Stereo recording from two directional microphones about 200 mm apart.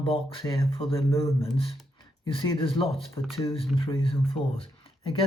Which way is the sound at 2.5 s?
25° left (ahead or behind).